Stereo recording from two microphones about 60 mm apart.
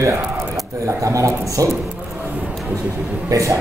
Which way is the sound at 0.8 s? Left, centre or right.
Right.